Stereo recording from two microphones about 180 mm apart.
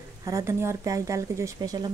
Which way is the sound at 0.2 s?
15° right (ahead or behind).